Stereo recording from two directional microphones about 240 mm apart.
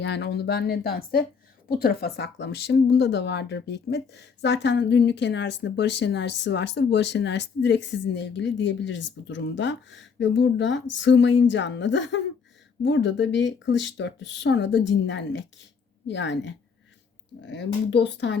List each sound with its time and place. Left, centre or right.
0.0 s a woman's voice: left